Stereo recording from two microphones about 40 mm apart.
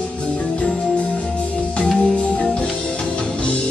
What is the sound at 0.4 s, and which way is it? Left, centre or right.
Music, left.